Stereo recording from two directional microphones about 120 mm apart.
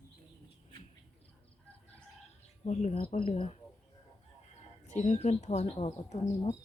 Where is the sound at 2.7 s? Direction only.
75° left (ahead or behind).